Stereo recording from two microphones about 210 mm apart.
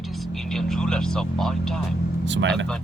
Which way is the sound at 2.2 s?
60° right (ahead or behind).